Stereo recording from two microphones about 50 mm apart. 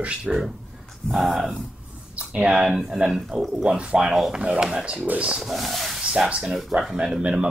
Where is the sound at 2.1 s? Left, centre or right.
Right.